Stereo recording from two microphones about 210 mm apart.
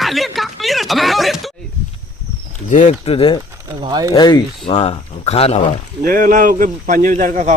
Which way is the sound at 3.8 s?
20° right (ahead or behind).